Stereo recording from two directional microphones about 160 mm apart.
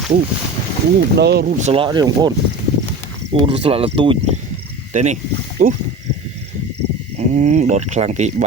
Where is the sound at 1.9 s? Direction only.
25° right (ahead or behind).